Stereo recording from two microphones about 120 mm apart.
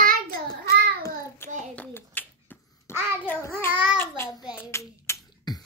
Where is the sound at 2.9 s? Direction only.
20° left (ahead or behind).